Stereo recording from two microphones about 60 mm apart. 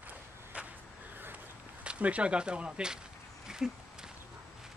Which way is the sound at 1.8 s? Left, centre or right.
Right.